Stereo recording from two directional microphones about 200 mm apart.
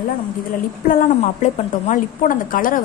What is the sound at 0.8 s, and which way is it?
A woman's voice, 40° left (ahead or behind).